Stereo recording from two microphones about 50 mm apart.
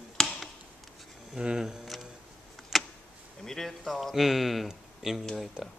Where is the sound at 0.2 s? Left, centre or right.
Centre.